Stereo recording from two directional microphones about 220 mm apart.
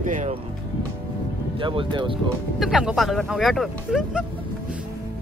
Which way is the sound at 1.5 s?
20° right (ahead or behind).